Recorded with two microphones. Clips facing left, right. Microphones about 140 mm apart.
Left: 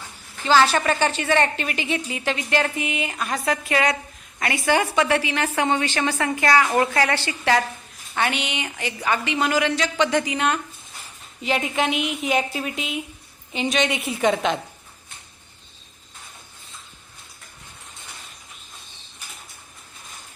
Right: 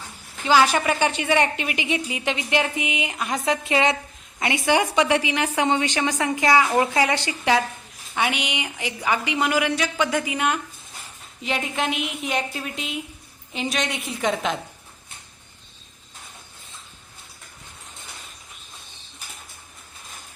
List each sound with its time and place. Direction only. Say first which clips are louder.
0.4 s a woman's voice: even; 15° right (ahead or behind)